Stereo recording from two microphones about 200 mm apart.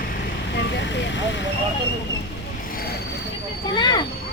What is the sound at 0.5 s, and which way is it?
Vehicle, 60° left (ahead or behind).